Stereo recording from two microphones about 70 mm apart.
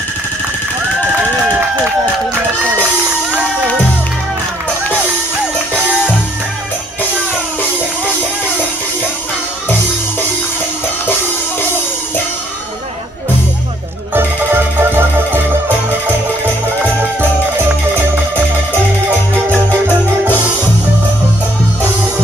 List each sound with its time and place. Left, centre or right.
14.1 s music: right